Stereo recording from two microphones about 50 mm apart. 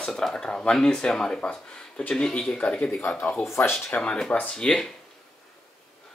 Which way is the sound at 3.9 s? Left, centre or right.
Centre.